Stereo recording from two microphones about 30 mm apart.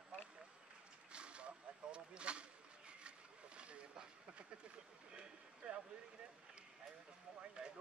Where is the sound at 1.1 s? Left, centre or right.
Right.